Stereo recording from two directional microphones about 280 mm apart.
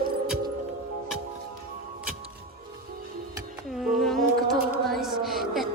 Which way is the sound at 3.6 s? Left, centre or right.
Centre.